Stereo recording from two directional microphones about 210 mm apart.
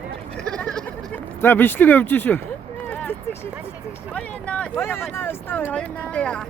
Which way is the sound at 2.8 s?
5° left (ahead or behind).